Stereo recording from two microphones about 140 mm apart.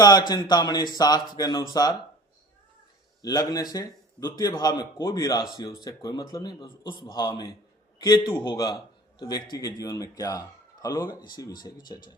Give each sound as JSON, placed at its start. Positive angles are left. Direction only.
{"t": 0.0, "sound": "a man's voice", "side_deg": 30}
{"t": 3.2, "sound": "a man's voice", "side_deg": 25}